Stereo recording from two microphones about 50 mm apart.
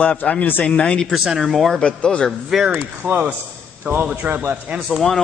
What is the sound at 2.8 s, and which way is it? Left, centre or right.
Speech, right.